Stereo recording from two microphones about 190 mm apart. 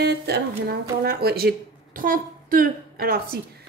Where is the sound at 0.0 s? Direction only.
60° right (ahead or behind).